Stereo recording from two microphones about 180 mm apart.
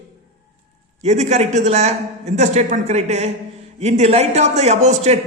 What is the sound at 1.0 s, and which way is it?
A man's voice, 40° right (ahead or behind).